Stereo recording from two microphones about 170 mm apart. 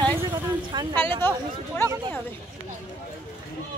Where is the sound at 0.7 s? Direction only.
25° right (ahead or behind).